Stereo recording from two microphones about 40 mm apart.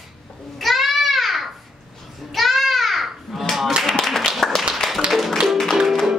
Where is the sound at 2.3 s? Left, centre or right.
Centre.